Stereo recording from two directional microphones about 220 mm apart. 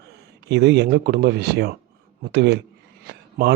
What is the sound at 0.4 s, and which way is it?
Speech, 50° right (ahead or behind).